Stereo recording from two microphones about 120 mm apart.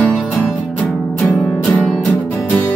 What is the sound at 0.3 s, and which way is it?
Music, 5° left (ahead or behind).